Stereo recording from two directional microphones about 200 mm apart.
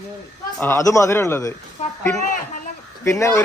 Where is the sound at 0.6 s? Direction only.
15° left (ahead or behind).